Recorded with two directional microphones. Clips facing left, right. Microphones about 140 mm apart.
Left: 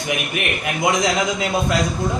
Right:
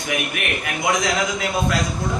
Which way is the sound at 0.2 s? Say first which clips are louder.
Left 1 dB; 20° left (ahead or behind).